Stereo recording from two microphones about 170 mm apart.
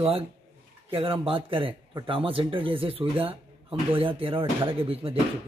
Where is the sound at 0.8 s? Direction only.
35° right (ahead or behind).